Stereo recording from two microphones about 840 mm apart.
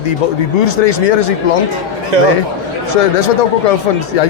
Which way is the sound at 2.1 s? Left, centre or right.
Right.